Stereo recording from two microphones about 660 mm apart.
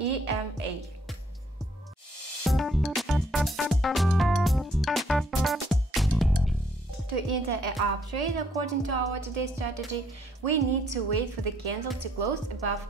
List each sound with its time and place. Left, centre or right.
0.0 s music: right
2.4 s music: centre
7.2 s a woman's voice: right